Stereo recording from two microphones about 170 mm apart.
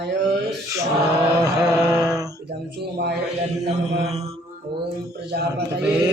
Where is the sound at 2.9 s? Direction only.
75° right (ahead or behind).